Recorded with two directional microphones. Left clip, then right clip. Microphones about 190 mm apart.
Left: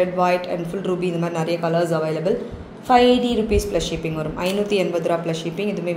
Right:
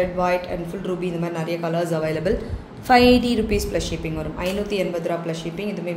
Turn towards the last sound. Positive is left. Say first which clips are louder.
# left 3 dB
turn(degrees=20)  # may be behind; listen again after turning